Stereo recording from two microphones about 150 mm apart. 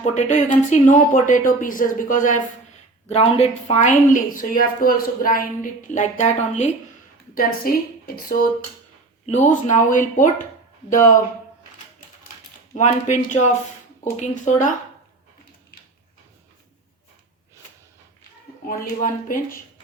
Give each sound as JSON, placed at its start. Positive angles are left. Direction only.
{"t": 0.0, "sound": "speech", "side_deg": 50}
{"t": 3.1, "sound": "speech", "side_deg": 45}
{"t": 5.9, "sound": "speech", "side_deg": 50}
{"t": 7.3, "sound": "a woman's voice", "side_deg": 75}
{"t": 9.2, "sound": "speech", "side_deg": 50}
{"t": 12.7, "sound": "speech", "side_deg": 55}
{"t": 18.6, "sound": "a woman's voice", "side_deg": 65}